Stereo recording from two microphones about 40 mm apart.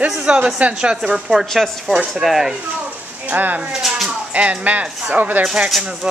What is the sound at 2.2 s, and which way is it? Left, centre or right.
Speech, centre.